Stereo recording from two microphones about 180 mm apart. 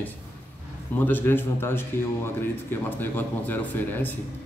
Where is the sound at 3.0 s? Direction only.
10° left (ahead or behind).